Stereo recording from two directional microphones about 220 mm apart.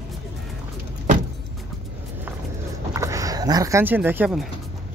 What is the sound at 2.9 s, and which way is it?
Speech, 15° right (ahead or behind).